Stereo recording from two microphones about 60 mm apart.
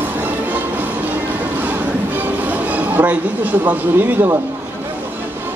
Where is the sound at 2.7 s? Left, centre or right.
Right.